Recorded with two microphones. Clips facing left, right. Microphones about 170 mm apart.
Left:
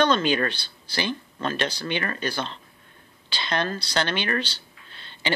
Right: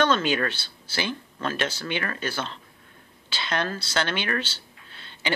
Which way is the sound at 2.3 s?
15° left (ahead or behind).